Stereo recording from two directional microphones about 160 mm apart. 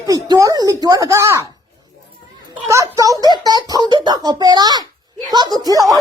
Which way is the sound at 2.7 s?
20° right (ahead or behind).